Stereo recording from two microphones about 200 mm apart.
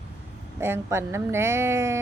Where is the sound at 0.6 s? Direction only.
10° right (ahead or behind).